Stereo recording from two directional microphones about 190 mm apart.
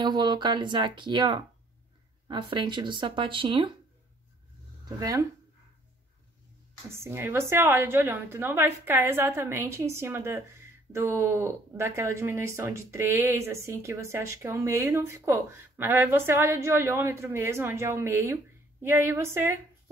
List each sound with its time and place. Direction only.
0.0 s speech: 25° right (ahead or behind)
4.8 s speech: 20° right (ahead or behind)
7.0 s a woman's voice: 10° right (ahead or behind)